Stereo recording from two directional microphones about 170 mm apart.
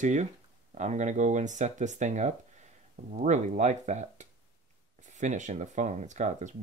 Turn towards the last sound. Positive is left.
turn(degrees=-45)  # may be behind; listen again after turning